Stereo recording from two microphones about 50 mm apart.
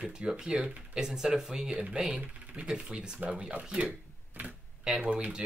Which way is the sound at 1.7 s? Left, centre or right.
Right.